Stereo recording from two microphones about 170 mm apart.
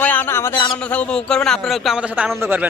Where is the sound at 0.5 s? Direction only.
25° left (ahead or behind).